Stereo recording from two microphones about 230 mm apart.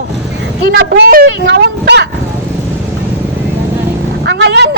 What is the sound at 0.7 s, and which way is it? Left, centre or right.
A man's voice, right.